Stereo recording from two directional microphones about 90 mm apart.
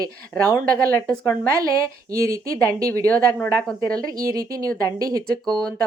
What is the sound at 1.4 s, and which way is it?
Speech, 35° right (ahead or behind).